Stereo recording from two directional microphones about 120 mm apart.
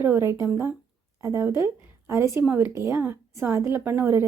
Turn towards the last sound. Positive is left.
turn(degrees=-20)  # may be behind; listen again after turning